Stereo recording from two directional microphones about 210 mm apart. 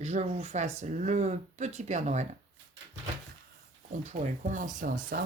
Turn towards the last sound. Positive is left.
turn(degrees=-40)  # may be behind; listen again after turning